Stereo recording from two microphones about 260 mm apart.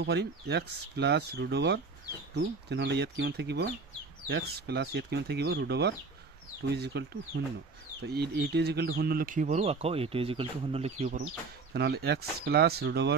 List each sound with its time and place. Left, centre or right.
0.0 s speech: right
11.7 s speech: right